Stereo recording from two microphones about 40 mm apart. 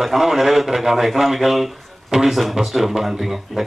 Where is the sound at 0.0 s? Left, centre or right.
Centre.